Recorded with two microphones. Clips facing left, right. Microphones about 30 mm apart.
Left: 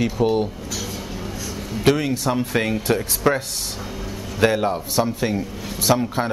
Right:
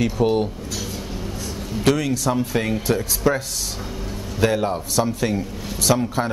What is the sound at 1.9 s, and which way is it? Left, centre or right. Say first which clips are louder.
Speech: left 1 dB; left.